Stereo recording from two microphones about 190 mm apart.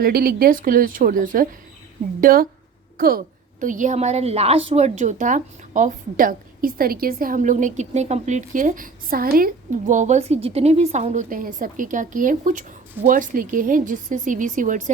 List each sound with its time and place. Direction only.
0.0 s a woman's voice: 50° right (ahead or behind)